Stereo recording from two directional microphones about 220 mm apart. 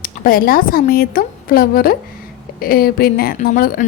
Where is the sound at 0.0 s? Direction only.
40° left (ahead or behind).